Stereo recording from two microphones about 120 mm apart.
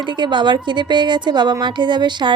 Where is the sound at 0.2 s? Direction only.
40° right (ahead or behind).